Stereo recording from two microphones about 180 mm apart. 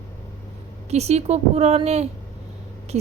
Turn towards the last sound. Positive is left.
turn(degrees=-40)  # may be behind; listen again after turning